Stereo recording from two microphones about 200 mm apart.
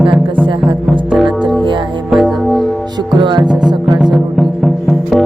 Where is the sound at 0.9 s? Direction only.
Centre (ahead or behind).